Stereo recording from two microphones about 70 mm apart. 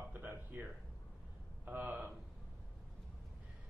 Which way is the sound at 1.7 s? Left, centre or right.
Right.